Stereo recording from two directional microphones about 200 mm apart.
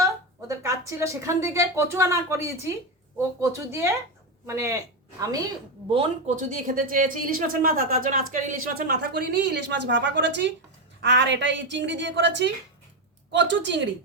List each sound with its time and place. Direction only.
0.0 s a man's voice: 15° right (ahead or behind)
5.9 s a woman's voice: 30° right (ahead or behind); by 13.8 s 65° right (ahead or behind)